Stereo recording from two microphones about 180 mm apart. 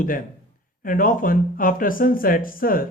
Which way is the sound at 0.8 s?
50° left (ahead or behind).